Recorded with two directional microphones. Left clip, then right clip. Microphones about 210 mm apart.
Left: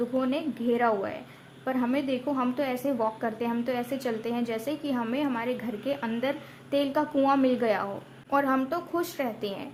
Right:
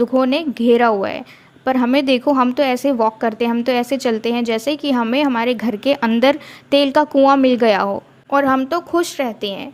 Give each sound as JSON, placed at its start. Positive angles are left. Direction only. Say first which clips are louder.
{"t": 0.0, "sound": "a woman's voice", "louder": "right 12 dB", "side_deg": -40}